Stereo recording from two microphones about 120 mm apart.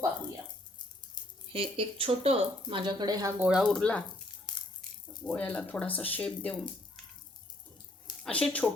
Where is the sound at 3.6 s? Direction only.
10° left (ahead or behind).